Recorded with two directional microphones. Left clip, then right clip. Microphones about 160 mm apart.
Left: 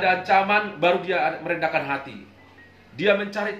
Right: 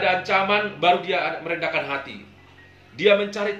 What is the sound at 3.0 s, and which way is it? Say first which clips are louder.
Speech: right 3 dB; 20° left (ahead or behind).